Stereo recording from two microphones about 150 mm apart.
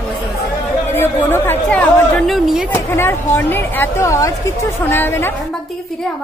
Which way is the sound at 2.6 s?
15° left (ahead or behind).